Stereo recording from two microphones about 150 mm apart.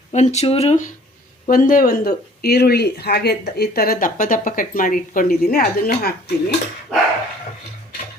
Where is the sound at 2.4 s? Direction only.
90° left.